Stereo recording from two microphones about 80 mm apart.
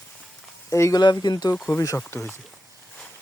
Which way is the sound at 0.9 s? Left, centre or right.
Left.